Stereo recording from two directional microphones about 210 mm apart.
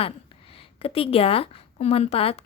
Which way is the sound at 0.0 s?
25° left (ahead or behind).